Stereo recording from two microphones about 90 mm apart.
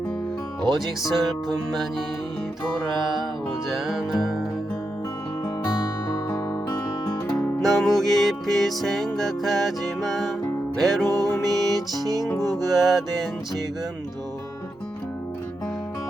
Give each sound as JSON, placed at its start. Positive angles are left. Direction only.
{"t": 1.0, "sound": "music", "side_deg": 0}
{"t": 3.7, "sound": "music", "side_deg": -5}
{"t": 5.6, "sound": "music", "side_deg": 45}
{"t": 7.6, "sound": "music", "side_deg": 0}
{"t": 12.3, "sound": "music", "side_deg": 35}
{"t": 12.5, "sound": "music", "side_deg": 0}